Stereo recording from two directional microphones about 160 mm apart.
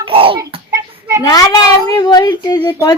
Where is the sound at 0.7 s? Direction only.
20° right (ahead or behind).